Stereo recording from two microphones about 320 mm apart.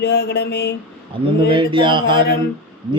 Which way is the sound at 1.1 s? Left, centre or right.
Centre.